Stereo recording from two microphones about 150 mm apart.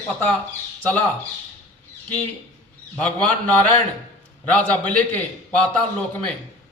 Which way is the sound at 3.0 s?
10° left (ahead or behind).